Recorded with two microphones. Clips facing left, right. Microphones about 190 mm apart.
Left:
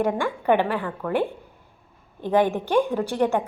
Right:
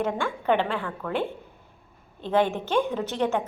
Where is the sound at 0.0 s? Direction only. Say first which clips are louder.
Left 4 dB; 15° left (ahead or behind).